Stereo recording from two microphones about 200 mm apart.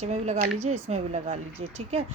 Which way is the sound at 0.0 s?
35° right (ahead or behind).